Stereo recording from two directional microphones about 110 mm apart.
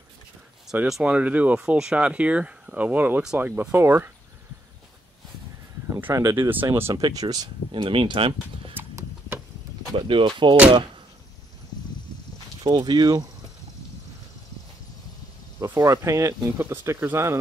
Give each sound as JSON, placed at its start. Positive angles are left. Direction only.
{"t": 0.8, "sound": "speech", "side_deg": -5}
{"t": 5.9, "sound": "a sound", "side_deg": -15}
{"t": 6.1, "sound": "speech", "side_deg": -30}
{"t": 7.0, "sound": "speech", "side_deg": -35}
{"t": 9.9, "sound": "speech", "side_deg": -50}
{"t": 12.6, "sound": "speech", "side_deg": -40}
{"t": 15.6, "sound": "speech", "side_deg": -25}